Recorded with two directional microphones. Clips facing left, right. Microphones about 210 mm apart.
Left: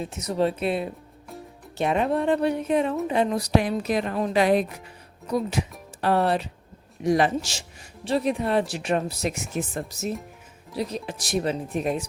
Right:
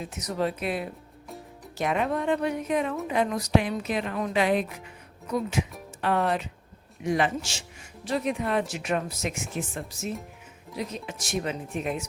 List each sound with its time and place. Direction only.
0.0 s speech: 30° left (ahead or behind)